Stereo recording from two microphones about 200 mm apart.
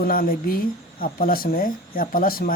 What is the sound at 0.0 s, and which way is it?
Speech, 45° left (ahead or behind).